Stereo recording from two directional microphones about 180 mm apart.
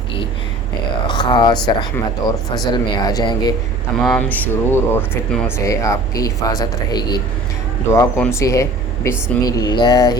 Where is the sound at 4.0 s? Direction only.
5° left (ahead or behind); by 10.1 s 20° left (ahead or behind).